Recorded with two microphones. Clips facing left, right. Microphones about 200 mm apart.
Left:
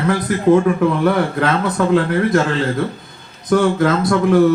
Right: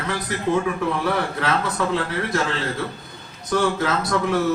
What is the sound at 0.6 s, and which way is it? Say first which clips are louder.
A man's voice: left 8 dB; 50° left (ahead or behind).